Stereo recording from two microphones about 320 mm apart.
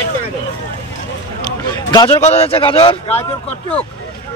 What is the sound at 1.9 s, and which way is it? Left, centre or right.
A man's voice, centre.